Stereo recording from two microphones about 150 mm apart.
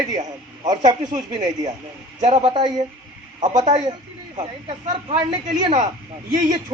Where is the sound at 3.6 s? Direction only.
30° right (ahead or behind).